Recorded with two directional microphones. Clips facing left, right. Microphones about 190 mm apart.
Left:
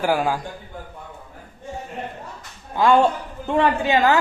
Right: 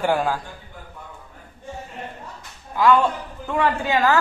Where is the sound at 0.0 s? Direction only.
10° left (ahead or behind).